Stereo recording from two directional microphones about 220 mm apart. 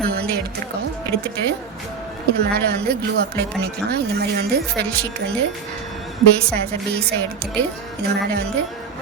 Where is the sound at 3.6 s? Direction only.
50° right (ahead or behind).